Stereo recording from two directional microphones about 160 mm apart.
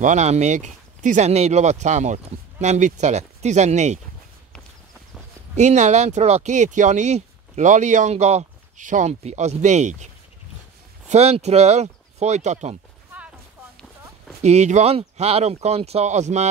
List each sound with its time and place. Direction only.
0.0 s speech: 45° right (ahead or behind)
5.6 s speech: 45° right (ahead or behind)
11.1 s speech: 40° right (ahead or behind)
14.4 s speech: 45° right (ahead or behind)